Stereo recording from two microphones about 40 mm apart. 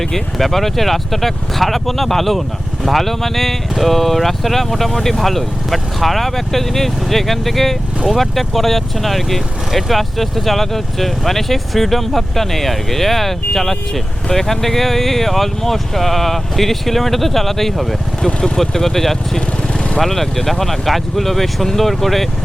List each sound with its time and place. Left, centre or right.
0.0 s speech: centre
18.3 s speech: left
18.5 s speech: centre